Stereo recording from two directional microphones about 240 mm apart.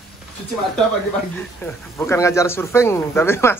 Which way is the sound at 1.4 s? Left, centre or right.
Centre.